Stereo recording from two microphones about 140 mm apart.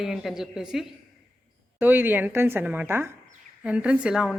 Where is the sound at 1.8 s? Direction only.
15° right (ahead or behind).